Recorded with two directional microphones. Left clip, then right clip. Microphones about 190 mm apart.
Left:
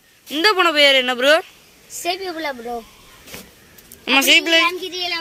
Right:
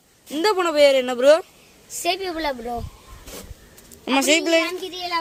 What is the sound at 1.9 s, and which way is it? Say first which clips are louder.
Speech: even; 30° right (ahead or behind).